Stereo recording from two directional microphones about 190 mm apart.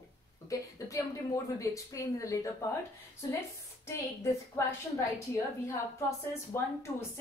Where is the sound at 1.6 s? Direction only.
15° left (ahead or behind).